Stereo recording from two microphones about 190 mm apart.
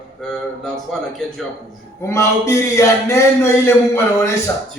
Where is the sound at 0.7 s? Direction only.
5° left (ahead or behind).